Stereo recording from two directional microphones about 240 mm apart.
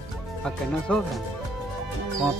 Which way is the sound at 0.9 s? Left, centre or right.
Centre.